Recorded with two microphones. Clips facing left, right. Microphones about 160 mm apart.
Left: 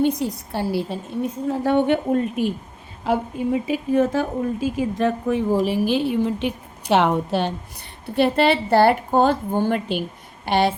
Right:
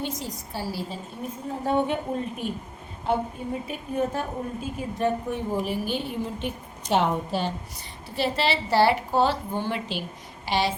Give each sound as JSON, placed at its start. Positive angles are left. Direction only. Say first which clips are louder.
{"t": 0.0, "sound": "a woman's voice", "louder": "left 11 dB", "side_deg": 60}
{"t": 1.5, "sound": "a woman's voice", "louder": "left 6 dB", "side_deg": 80}